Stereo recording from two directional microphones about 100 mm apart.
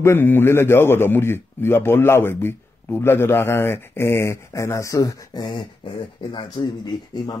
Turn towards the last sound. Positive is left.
turn(degrees=40)  # may be behind; listen again after turning